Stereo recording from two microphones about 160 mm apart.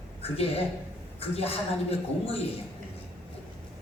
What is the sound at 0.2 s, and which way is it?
A man's voice, 40° left (ahead or behind).